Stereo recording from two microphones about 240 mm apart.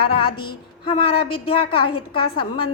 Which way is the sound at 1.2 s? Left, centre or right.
Left.